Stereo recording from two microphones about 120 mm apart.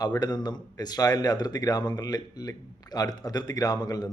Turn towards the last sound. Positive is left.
turn(degrees=35)  # may be behind; listen again after turning